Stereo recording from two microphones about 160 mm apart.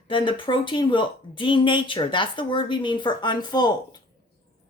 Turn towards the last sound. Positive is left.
turn(degrees=25)  # may be behind; listen again after turning